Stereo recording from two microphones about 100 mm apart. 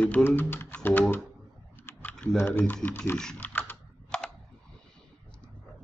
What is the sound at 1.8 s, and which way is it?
Typing, 20° left (ahead or behind).